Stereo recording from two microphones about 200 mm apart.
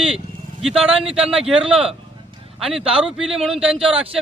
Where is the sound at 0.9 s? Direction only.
25° right (ahead or behind).